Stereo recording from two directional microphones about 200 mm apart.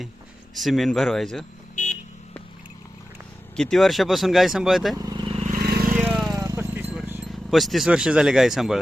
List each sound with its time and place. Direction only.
0.5 s speech: centre (ahead or behind)
1.7 s vehicle: 35° left (ahead or behind)
3.5 s speech: 5° left (ahead or behind)
4.9 s vehicle: 20° right (ahead or behind)
5.5 s vehicle: 50° right (ahead or behind)
6.0 s vehicle: centre (ahead or behind)
6.3 s a sound: 15° right (ahead or behind); by 8.8 s centre (ahead or behind)